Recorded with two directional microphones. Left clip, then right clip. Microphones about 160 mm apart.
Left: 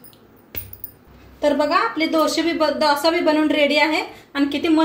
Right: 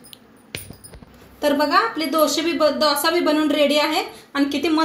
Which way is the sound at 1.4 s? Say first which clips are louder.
Even; 50° right (ahead or behind).